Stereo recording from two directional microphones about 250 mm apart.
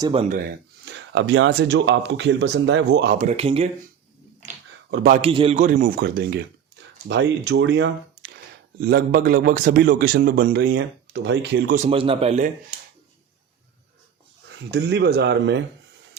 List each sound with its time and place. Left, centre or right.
0.0 s a man's voice: right
0.3 s speech: right
4.9 s a man's voice: right
5.2 s a man's voice: right
11.7 s a man's voice: right
14.6 s speech: right